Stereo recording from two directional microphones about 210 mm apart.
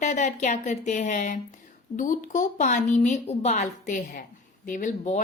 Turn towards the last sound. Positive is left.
turn(degrees=35)  # may be behind; listen again after turning